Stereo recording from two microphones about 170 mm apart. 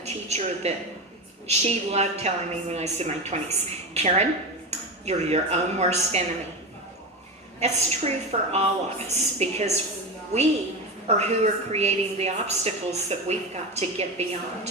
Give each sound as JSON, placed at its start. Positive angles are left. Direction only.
{"t": 0.0, "sound": "a woman's voice", "side_deg": -40}
{"t": 7.6, "sound": "a woman's voice", "side_deg": -40}